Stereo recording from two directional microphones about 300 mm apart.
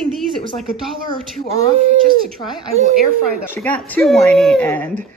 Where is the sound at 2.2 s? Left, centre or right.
Centre.